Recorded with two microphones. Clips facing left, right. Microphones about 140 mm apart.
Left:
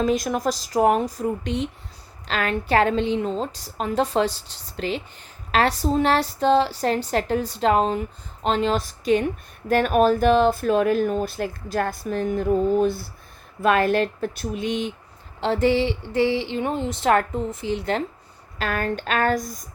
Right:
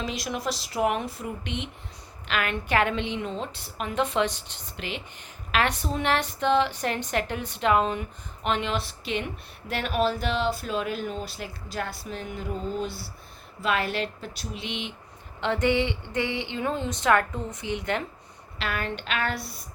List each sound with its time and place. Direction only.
0.0 s a woman's voice: 45° left (ahead or behind)
18.6 s speech: 45° left (ahead or behind)